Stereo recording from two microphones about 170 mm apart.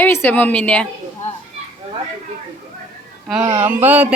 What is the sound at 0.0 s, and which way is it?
A woman's voice, 10° left (ahead or behind).